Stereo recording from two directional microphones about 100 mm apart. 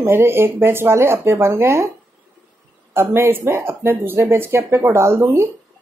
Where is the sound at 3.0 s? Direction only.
25° right (ahead or behind).